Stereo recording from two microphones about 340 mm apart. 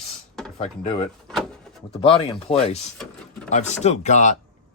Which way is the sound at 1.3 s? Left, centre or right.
Centre.